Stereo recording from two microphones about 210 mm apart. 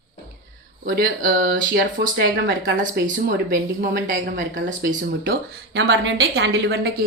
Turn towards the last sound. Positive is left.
turn(degrees=-50)  # may be behind; listen again after turning